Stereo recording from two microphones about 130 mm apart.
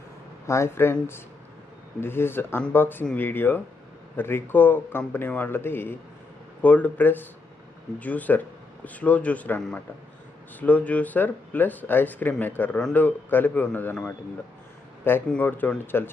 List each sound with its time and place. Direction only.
0.4 s speech: 20° left (ahead or behind)